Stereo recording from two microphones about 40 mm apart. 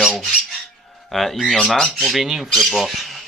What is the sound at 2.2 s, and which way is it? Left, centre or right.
Speech, centre.